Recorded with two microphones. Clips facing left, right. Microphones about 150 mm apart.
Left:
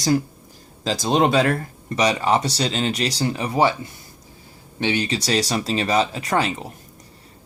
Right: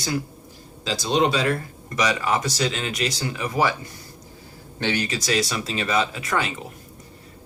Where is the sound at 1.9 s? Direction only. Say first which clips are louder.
Left 4 dB; 30° left (ahead or behind).